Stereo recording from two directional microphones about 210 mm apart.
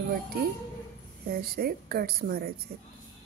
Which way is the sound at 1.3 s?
45° right (ahead or behind).